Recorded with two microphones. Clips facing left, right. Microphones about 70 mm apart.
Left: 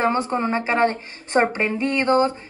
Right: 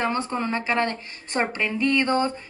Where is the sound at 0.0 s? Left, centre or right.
Left.